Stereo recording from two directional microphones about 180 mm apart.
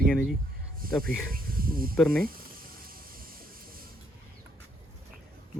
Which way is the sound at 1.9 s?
Centre (ahead or behind).